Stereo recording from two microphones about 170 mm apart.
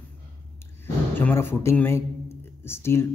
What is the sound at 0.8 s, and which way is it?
A man's voice, 10° left (ahead or behind).